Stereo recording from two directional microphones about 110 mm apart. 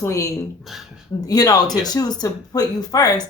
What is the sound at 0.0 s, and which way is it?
Speech, 30° left (ahead or behind).